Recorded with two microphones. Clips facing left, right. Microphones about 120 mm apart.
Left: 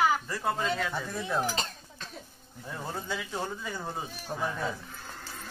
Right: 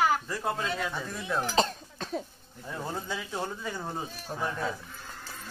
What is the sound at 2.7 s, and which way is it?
Speech, 15° right (ahead or behind).